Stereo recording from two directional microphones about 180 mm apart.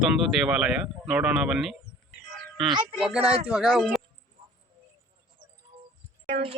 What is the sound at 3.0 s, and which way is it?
Speech, 5° right (ahead or behind).